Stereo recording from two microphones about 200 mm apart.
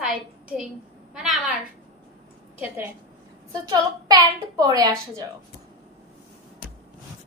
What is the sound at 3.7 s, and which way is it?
A woman's voice, 20° right (ahead or behind).